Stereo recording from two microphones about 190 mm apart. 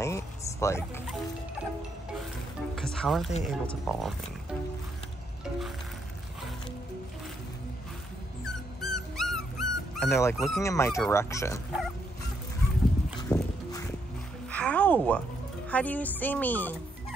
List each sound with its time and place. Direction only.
0.0 s a sound: 15° left (ahead or behind)
2.7 s speech: 5° left (ahead or behind)
8.8 s dog: centre (ahead or behind)
10.3 s speech: centre (ahead or behind)
10.6 s speech: 15° left (ahead or behind)
13.3 s music: 5° left (ahead or behind)
14.5 s a sound: 5° left (ahead or behind)
15.7 s speech: 10° left (ahead or behind)